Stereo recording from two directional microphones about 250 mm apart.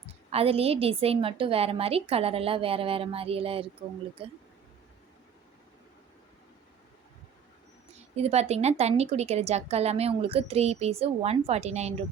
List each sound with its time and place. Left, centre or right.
0.3 s a woman's voice: right
7.9 s a woman's voice: right